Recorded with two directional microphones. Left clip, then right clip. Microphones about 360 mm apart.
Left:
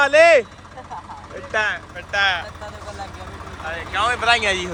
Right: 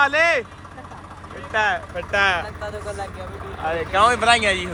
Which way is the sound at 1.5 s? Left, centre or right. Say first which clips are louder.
Right 1 dB; centre.